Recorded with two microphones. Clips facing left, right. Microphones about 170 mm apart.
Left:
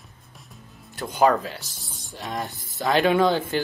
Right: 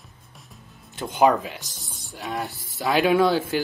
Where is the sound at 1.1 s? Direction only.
15° right (ahead or behind).